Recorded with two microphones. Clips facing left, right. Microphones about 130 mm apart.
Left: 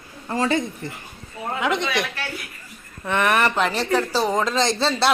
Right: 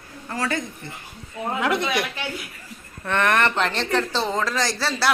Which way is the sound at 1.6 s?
5° right (ahead or behind).